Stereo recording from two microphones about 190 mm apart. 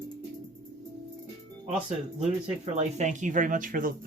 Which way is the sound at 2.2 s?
35° right (ahead or behind).